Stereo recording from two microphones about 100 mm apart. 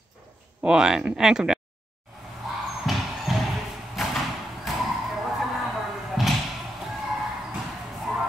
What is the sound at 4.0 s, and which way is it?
Thump, centre (ahead or behind).